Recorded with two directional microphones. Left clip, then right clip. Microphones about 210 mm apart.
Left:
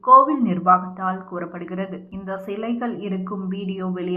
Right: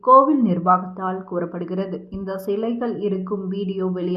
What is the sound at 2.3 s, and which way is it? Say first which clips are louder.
Speech: right 3 dB; 30° right (ahead or behind).